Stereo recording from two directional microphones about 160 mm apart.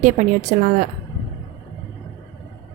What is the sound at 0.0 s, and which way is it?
Speech, 50° right (ahead or behind).